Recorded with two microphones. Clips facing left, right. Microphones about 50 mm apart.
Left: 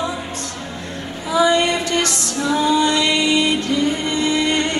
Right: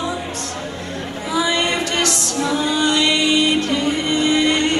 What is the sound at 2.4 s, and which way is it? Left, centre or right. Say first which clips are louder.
Music: left 3 dB; right.